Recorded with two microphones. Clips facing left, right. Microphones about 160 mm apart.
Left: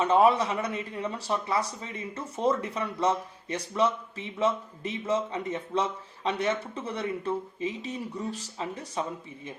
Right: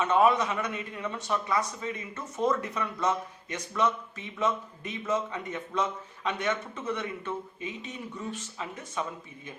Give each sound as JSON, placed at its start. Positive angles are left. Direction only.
{"t": 0.0, "sound": "speech", "side_deg": 30}